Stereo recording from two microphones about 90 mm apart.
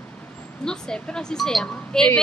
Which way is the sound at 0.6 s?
5° left (ahead or behind).